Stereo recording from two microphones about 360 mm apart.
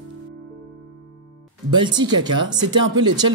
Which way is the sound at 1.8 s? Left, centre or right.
Centre.